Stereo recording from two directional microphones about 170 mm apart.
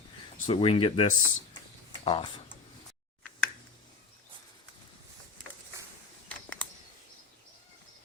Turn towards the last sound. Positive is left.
turn(degrees=5)  # may be behind; listen again after turning